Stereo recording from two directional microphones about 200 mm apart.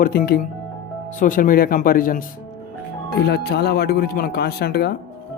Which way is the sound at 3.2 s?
55° left (ahead or behind).